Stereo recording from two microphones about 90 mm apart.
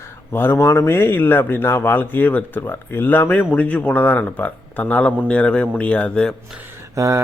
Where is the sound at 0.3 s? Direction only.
25° left (ahead or behind).